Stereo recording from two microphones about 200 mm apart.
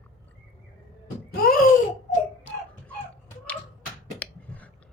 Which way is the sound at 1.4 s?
45° left (ahead or behind).